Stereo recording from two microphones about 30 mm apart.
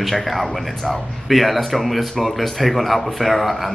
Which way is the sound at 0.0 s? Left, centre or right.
Centre.